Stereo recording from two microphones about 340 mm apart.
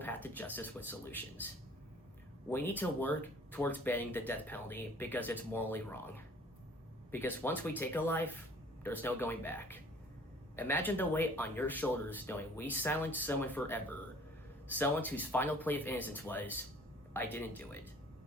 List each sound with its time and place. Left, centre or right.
0.0 s speech: centre
2.5 s speech: centre